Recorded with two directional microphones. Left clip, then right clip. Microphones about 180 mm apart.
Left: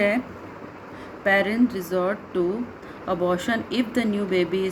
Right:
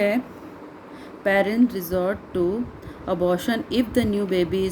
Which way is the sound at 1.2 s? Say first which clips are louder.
Right 1 dB; 60° right (ahead or behind).